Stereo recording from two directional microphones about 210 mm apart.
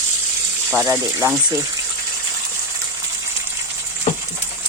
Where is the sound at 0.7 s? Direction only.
10° right (ahead or behind).